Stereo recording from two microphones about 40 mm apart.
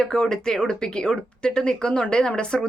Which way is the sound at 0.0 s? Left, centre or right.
Centre.